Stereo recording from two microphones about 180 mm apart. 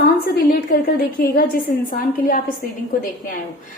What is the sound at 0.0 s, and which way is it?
Speech, 55° left (ahead or behind).